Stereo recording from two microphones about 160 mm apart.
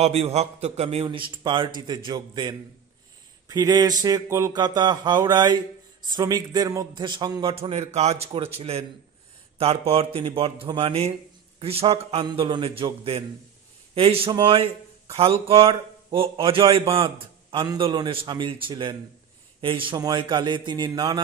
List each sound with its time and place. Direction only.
0.0 s speech: 40° right (ahead or behind)
5.3 s speech: 15° right (ahead or behind)
7.5 s speech: 40° right (ahead or behind); by 21.2 s 25° right (ahead or behind)